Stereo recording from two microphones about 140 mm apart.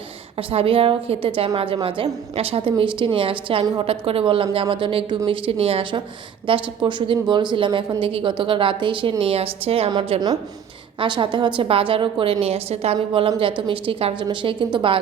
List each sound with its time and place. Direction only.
0.5 s a woman's voice: 40° right (ahead or behind)
9.9 s a woman's voice: 30° right (ahead or behind)